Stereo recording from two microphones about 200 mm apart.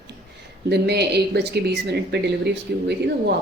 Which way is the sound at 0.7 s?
55° right (ahead or behind).